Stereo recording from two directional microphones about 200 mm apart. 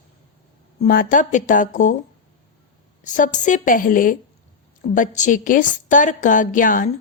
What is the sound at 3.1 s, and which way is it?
A woman's voice, 40° left (ahead or behind).